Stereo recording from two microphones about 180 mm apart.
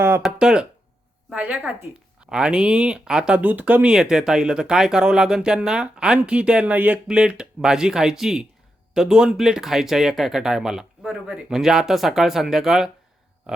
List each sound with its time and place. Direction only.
0.2 s a woman's voice: 5° right (ahead or behind)